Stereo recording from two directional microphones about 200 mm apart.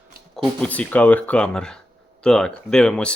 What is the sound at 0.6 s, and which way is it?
Speech, 5° left (ahead or behind).